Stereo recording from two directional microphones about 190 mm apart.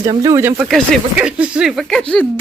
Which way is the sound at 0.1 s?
20° right (ahead or behind).